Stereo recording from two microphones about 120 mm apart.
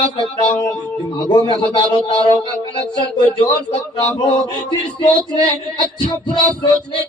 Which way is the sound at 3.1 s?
40° left (ahead or behind).